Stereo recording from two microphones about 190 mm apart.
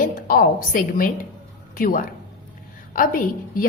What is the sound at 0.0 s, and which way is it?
A woman's voice, 50° left (ahead or behind).